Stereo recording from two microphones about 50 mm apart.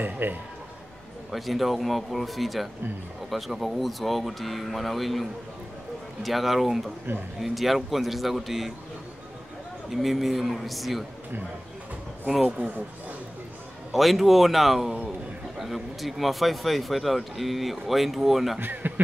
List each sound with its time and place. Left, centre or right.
0.0 s a man's voice: right
1.3 s speech: centre
9.8 s speech: centre
12.4 s a man's voice: right
13.9 s speech: centre
18.6 s speech: right